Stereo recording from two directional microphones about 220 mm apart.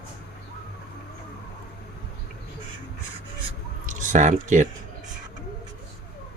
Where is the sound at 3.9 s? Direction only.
35° right (ahead or behind).